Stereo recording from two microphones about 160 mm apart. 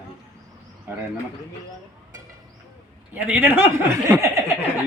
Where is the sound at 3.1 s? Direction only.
10° right (ahead or behind).